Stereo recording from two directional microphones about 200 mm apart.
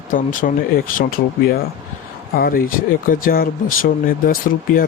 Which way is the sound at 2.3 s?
45° left (ahead or behind).